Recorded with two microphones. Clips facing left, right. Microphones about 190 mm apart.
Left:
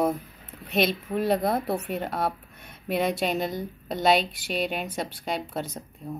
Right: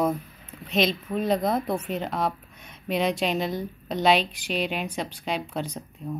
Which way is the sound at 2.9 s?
50° left (ahead or behind).